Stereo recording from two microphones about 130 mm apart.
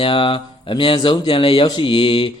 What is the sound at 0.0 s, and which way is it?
Speech, 40° left (ahead or behind).